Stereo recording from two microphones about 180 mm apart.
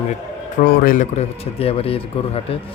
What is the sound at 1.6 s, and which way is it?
Speech, 30° left (ahead or behind).